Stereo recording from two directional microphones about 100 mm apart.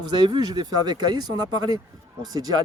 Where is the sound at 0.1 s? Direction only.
45° right (ahead or behind).